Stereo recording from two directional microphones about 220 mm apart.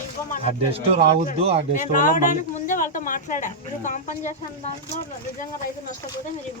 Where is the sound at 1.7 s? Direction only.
35° left (ahead or behind).